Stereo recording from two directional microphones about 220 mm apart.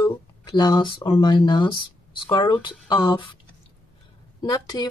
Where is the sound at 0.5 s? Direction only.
20° left (ahead or behind).